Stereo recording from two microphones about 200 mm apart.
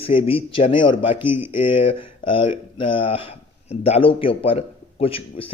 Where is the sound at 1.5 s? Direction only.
25° left (ahead or behind).